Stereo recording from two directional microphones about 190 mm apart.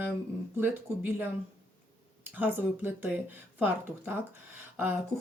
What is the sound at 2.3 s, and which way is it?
Speech, 10° right (ahead or behind).